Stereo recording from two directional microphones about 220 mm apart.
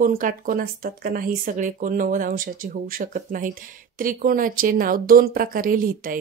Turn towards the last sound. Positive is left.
turn(degrees=-40)  # may be behind; listen again after turning